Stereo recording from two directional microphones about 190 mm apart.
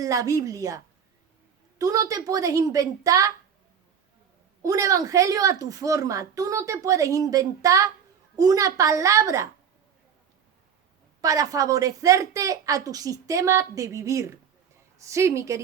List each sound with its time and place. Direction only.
0.0 s a woman's voice: 15° right (ahead or behind)
1.8 s a woman's voice: 15° right (ahead or behind)
4.6 s a woman's voice: 15° right (ahead or behind)
11.2 s a woman's voice: 20° right (ahead or behind)